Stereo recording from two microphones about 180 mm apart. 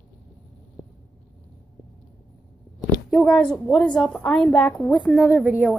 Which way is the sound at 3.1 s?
Centre (ahead or behind).